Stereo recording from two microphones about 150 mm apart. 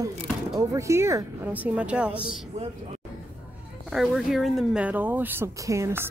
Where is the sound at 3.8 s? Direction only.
Centre (ahead or behind).